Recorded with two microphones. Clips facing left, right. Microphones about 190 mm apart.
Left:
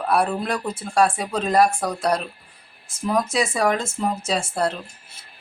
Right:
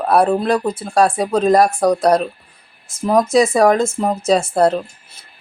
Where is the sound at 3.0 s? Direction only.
40° right (ahead or behind).